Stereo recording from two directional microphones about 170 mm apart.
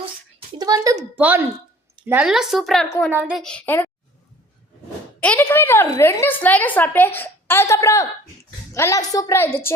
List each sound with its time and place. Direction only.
0.6 s a child's voice: 20° right (ahead or behind)
1.1 s a child's voice: 10° right (ahead or behind)
3.4 s speech: 5° left (ahead or behind)
5.2 s a woman's voice: 10° left (ahead or behind)